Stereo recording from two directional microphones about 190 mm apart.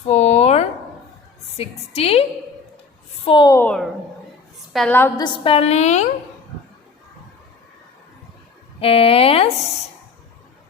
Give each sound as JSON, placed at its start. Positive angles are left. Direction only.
{"t": 0.0, "sound": "a sound", "side_deg": 35}
{"t": 1.5, "sound": "a woman's voice", "side_deg": 30}
{"t": 3.2, "sound": "a child's voice", "side_deg": 25}
{"t": 4.7, "sound": "a woman's voice", "side_deg": 5}
{"t": 5.2, "sound": "a woman's voice", "side_deg": 30}
{"t": 8.8, "sound": "a woman's voice", "side_deg": 30}